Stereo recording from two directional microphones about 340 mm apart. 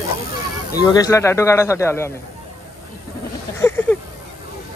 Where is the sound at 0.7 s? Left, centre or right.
Centre.